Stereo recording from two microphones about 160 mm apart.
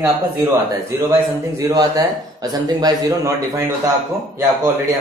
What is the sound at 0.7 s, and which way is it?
A man's voice, 20° right (ahead or behind).